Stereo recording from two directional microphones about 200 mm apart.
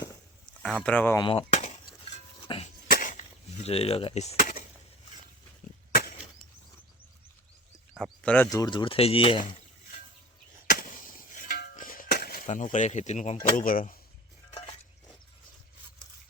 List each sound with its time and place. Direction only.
0.6 s speech: centre (ahead or behind)
1.2 s chop: 25° left (ahead or behind)
2.1 s dishes: 30° left (ahead or behind)
2.8 s a sound: 45° left (ahead or behind)
5.9 s a sound: 50° left (ahead or behind)
7.9 s speech: 5° left (ahead or behind)
8.4 s speech: 20° left (ahead or behind)
10.7 s music: 40° left (ahead or behind)